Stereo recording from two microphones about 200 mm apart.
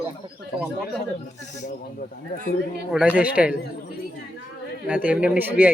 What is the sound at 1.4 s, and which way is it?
Speech, 40° left (ahead or behind).